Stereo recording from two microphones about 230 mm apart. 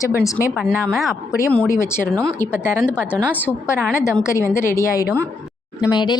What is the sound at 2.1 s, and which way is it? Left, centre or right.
Speech, centre.